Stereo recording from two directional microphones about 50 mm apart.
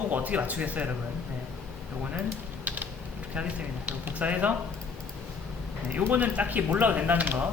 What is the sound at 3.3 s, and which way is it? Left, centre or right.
Speech, right.